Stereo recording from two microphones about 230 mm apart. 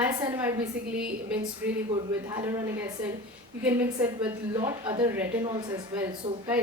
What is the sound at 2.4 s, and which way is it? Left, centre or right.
Speech, centre.